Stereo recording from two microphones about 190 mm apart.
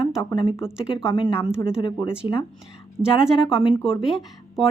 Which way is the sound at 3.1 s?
25° left (ahead or behind).